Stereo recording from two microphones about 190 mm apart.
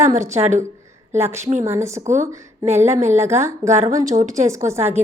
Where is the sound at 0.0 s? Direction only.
40° right (ahead or behind).